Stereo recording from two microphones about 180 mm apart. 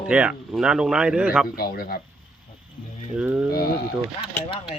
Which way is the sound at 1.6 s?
55° left (ahead or behind).